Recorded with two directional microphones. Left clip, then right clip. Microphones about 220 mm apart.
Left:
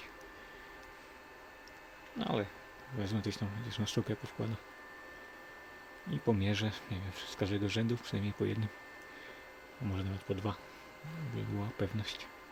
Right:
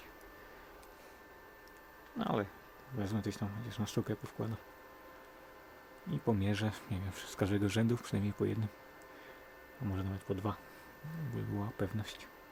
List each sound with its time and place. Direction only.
2.1 s speech: centre (ahead or behind)
6.1 s speech: centre (ahead or behind)
9.9 s speech: centre (ahead or behind)